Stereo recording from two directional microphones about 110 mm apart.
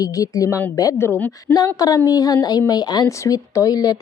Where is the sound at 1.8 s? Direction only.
35° left (ahead or behind).